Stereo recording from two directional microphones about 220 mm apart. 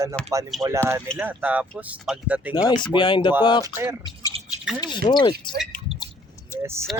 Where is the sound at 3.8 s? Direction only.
10° right (ahead or behind).